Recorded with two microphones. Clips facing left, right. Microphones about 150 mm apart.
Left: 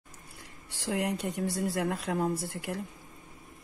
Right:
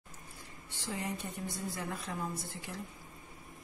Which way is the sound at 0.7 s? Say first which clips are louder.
Left 8 dB; 80° left.